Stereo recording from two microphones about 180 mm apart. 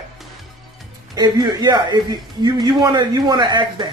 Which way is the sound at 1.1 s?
20° right (ahead or behind).